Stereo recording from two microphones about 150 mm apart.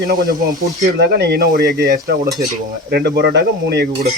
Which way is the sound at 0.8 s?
90° right.